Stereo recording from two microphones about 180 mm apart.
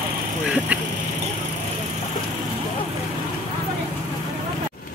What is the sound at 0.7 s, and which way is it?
Vehicle, 5° right (ahead or behind).